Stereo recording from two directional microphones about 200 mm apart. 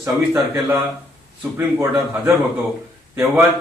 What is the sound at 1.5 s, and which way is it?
Speech, 15° right (ahead or behind).